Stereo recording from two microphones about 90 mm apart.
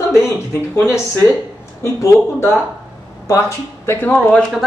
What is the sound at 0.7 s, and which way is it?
Speech, 25° left (ahead or behind).